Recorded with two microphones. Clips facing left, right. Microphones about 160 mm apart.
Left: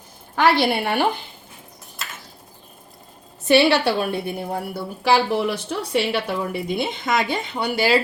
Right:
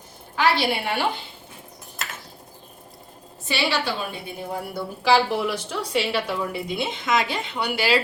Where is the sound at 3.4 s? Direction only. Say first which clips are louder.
Left 9 dB; 60° left (ahead or behind).